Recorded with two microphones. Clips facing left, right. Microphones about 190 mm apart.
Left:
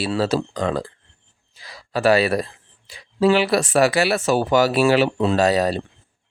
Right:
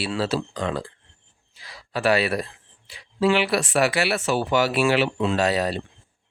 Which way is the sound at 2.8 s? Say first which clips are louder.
Left 4 dB; 40° left (ahead or behind).